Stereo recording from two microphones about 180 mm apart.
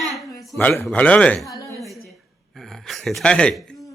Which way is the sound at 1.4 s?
20° left (ahead or behind).